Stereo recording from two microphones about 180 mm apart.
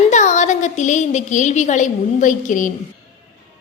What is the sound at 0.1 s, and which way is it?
A woman's voice, 40° left (ahead or behind).